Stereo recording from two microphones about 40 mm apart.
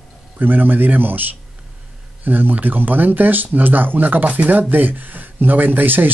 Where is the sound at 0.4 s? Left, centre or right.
Right.